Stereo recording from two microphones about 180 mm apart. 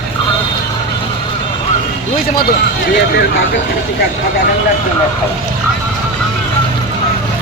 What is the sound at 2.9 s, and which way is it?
Speech, 80° left.